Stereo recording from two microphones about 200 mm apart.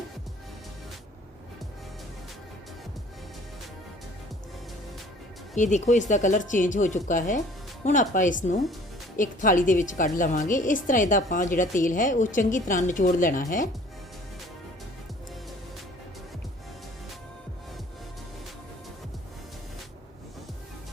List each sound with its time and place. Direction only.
5.5 s a woman's voice: 35° left (ahead or behind)